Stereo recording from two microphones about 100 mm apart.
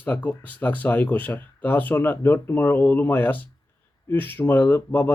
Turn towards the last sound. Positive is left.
turn(degrees=20)  # may be behind; listen again after turning